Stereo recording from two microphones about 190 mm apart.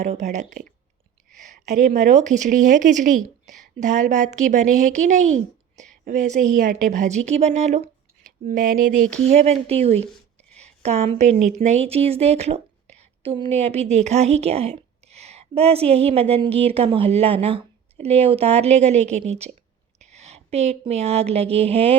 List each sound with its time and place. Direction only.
0.0 s speech: 40° right (ahead or behind)
9.2 s speech: 35° right (ahead or behind)
10.8 s speech: 35° right (ahead or behind)